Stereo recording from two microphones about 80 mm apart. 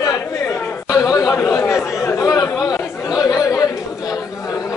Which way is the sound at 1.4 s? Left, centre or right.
Left.